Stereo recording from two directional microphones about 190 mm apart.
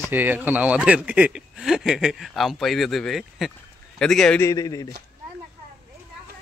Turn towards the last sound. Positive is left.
turn(degrees=20)  # may be behind; listen again after turning